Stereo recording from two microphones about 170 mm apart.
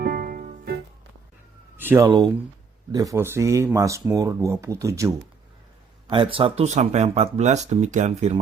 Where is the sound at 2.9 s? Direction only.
20° right (ahead or behind).